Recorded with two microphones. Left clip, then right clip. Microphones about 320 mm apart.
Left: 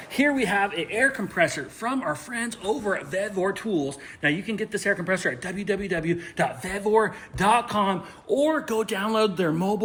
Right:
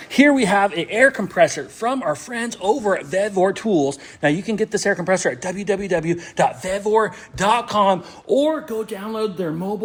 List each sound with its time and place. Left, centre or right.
0.1 s speech: right
0.4 s speech: right
0.7 s a woman's voice: right; by 9.7 s centre